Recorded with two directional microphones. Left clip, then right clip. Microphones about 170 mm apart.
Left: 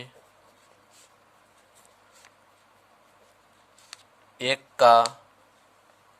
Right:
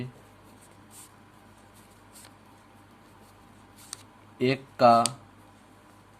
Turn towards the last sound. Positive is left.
turn(degrees=45)  # may be behind; listen again after turning